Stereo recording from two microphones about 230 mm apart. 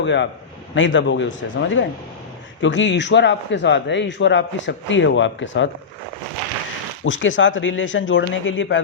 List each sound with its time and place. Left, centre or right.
0.0 s speech: left
7.0 s speech: left